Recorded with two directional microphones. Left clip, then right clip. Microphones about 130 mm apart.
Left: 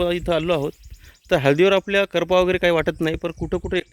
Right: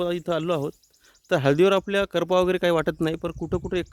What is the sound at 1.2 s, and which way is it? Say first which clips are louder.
Speech: left 3 dB; 20° right (ahead or behind).